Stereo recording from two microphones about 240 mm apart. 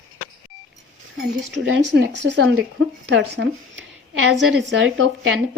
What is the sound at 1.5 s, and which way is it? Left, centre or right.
A woman's voice, right.